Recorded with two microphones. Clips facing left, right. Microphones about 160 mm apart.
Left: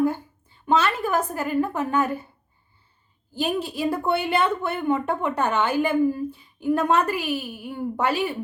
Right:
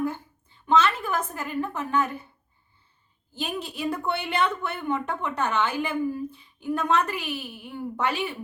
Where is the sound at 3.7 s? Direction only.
40° left (ahead or behind).